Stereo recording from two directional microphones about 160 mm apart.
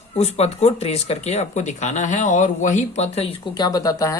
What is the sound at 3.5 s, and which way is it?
Speech, 25° left (ahead or behind).